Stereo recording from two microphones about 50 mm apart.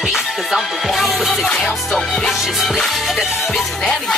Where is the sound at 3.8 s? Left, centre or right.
Centre.